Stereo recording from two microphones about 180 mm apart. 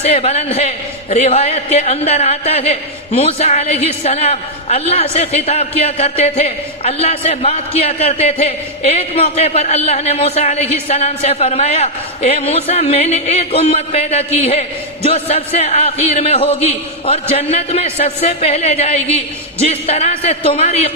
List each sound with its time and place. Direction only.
0.0 s a man's voice: 35° left (ahead or behind)